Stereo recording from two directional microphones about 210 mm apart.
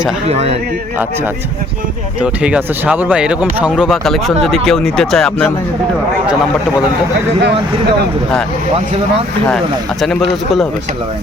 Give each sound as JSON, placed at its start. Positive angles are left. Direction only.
{"t": 0.3, "sound": "speech", "side_deg": -30}
{"t": 2.2, "sound": "speech", "side_deg": -5}